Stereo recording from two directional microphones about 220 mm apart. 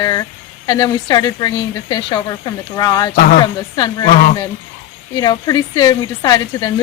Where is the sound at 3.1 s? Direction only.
40° left (ahead or behind).